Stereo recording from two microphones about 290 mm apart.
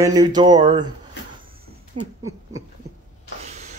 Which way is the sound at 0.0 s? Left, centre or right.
Centre.